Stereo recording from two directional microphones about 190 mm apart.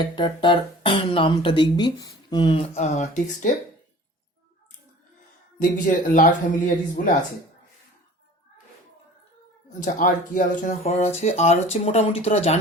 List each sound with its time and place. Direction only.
0.0 s speech: 25° left (ahead or behind)
5.5 s a man's voice: 45° left (ahead or behind)
9.8 s speech: 45° left (ahead or behind)